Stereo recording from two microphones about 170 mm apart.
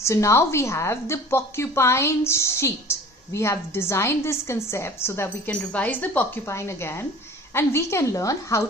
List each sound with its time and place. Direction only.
0.0 s a woman's voice: 15° left (ahead or behind)